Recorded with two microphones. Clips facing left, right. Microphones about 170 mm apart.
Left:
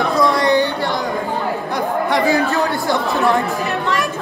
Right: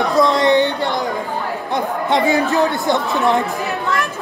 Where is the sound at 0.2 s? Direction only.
20° right (ahead or behind).